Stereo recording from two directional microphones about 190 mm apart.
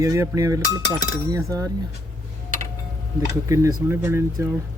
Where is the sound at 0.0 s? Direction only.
15° right (ahead or behind).